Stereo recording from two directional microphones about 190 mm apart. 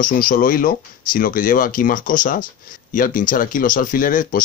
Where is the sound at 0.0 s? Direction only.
45° left (ahead or behind).